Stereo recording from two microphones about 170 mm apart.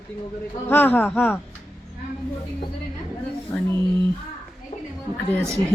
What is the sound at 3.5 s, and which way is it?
Speech, 15° left (ahead or behind).